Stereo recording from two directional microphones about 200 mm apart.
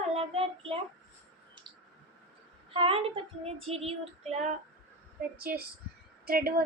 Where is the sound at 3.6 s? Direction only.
30° right (ahead or behind).